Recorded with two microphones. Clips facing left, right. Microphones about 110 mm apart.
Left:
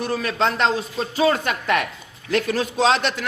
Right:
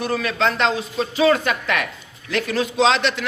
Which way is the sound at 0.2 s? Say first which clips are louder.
Left 2 dB; 40° left (ahead or behind).